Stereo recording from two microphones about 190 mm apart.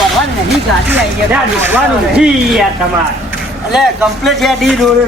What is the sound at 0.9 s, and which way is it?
Speech, 10° right (ahead or behind).